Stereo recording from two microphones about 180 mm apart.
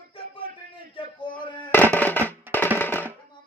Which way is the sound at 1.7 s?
10° left (ahead or behind).